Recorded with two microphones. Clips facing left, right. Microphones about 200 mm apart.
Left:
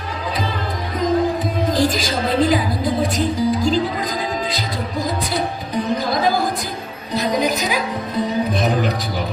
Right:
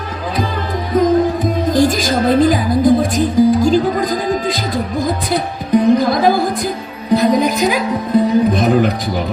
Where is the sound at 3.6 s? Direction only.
45° right (ahead or behind).